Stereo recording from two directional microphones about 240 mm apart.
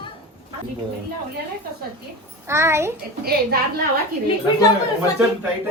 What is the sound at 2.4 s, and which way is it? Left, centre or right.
Speech, centre.